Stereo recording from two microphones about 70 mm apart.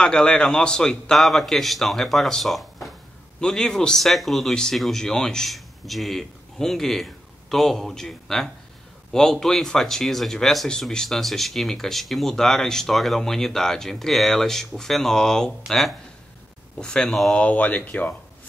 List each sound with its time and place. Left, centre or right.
0.0 s speech: centre
3.3 s speech: centre
17.4 s speech: left